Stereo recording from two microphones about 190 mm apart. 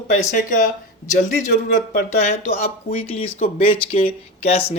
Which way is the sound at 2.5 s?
35° left (ahead or behind).